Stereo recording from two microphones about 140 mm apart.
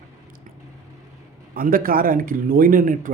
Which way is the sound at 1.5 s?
90° right.